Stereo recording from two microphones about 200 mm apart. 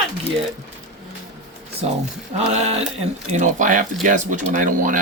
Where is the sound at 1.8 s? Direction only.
30° right (ahead or behind).